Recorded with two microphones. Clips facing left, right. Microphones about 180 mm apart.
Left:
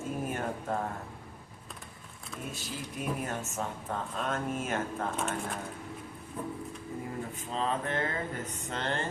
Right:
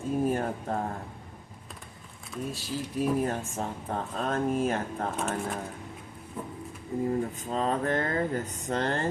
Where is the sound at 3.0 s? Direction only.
35° right (ahead or behind).